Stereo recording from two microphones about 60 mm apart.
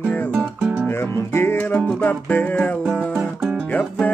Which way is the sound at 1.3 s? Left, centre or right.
Left.